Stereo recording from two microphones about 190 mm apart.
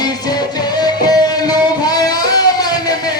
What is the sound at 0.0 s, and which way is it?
Music, 20° left (ahead or behind).